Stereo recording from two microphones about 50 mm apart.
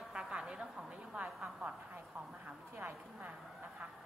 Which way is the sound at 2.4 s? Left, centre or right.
Right.